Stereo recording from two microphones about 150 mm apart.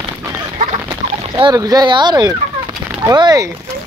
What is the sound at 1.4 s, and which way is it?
Speech, 25° right (ahead or behind).